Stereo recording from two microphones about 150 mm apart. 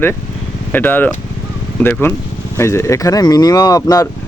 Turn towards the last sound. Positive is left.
turn(degrees=25)  # may be behind; listen again after turning